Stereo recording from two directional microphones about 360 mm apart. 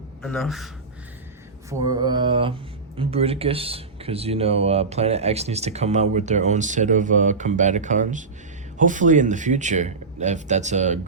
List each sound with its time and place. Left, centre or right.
0.2 s a man's voice: centre
1.9 s speech: centre